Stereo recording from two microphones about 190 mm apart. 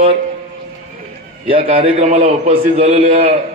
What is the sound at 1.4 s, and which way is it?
A man's voice, 30° right (ahead or behind).